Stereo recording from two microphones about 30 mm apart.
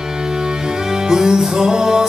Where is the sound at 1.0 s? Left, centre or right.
Right.